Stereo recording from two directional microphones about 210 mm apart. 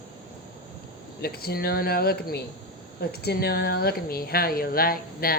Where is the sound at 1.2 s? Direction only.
50° left (ahead or behind).